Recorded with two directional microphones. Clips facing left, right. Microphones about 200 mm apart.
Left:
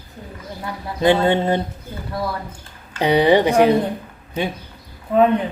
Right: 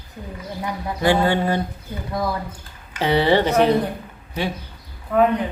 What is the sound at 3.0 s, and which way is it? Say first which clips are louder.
Speech: left 3 dB; 15° left (ahead or behind).